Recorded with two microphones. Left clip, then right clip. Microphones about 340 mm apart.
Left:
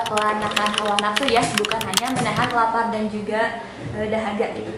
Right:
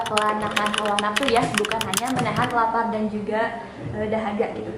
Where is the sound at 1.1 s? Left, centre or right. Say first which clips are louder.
Left 1 dB; centre.